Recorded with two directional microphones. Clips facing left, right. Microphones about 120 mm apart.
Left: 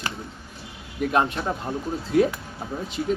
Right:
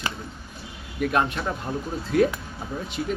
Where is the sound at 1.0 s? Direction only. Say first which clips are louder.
Left 1 dB; 25° left (ahead or behind).